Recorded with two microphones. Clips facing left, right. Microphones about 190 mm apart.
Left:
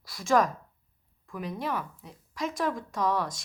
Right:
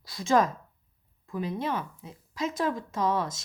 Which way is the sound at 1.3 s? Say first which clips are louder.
Right 3 dB; 25° right (ahead or behind).